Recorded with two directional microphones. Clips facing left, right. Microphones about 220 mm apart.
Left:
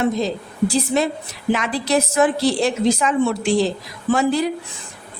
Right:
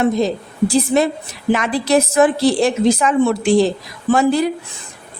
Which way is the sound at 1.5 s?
50° right (ahead or behind).